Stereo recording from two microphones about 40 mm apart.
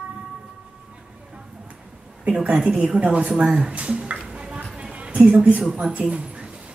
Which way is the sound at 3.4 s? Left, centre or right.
Centre.